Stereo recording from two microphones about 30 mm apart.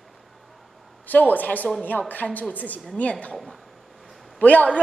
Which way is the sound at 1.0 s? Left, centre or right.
Left.